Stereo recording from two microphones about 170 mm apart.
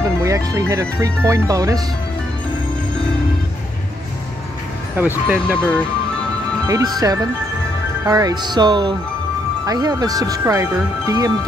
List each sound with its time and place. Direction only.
0.2 s speech: 20° right (ahead or behind)
4.9 s speech: 10° right (ahead or behind)
5.6 s speech: 10° left (ahead or behind)
6.7 s speech: 20° right (ahead or behind)